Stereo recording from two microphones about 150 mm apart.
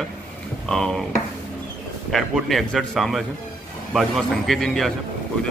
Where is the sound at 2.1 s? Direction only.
Centre (ahead or behind).